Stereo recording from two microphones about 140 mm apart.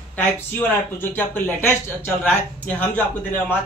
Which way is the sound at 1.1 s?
15° left (ahead or behind).